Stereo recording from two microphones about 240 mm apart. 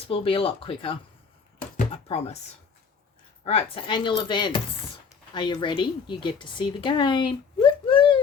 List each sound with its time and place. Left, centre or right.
0.1 s speech: left
2.0 s speech: left
3.4 s speech: left